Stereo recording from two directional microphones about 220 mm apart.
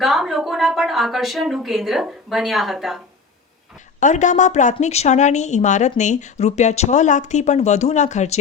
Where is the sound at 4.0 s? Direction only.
35° left (ahead or behind).